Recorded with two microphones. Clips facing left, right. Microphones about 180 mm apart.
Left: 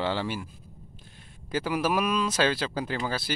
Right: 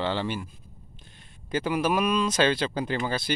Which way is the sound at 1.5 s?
5° left (ahead or behind).